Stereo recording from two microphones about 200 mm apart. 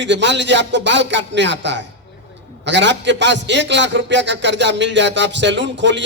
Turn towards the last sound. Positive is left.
turn(degrees=-65)  # may be behind; listen again after turning